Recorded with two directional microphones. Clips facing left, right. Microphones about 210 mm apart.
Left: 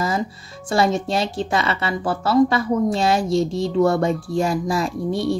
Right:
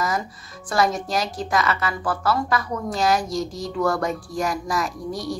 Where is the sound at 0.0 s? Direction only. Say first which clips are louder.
Left 3 dB; 25° left (ahead or behind).